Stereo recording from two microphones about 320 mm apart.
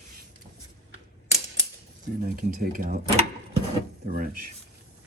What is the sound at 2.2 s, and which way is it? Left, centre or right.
Speech, right.